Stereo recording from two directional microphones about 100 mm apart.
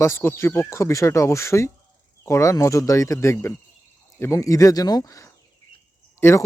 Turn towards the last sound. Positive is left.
turn(degrees=25)  # may be behind; listen again after turning